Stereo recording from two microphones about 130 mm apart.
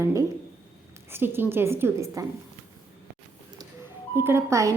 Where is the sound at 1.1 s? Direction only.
15° right (ahead or behind).